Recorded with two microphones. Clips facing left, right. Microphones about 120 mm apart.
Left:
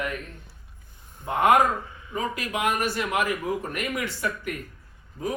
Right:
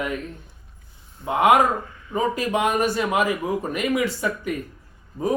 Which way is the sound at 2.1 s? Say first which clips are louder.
Right 7 dB; 30° right (ahead or behind).